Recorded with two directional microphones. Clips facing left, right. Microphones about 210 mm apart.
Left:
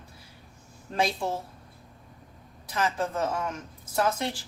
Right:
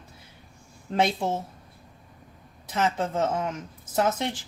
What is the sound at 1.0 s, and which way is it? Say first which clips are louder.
Speech: right 3 dB; 25° right (ahead or behind).